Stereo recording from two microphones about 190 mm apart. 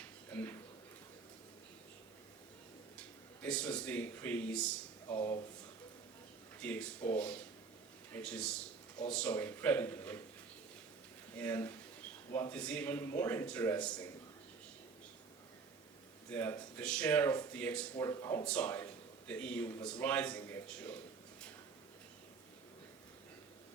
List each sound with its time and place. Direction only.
0.3 s a sound: 10° left (ahead or behind)
3.4 s speech: 5° left (ahead or behind)
5.0 s speech: 25° left (ahead or behind)
6.6 s speech: 5° left (ahead or behind)
11.3 s speech: 10° left (ahead or behind)
16.3 s speech: 10° left (ahead or behind)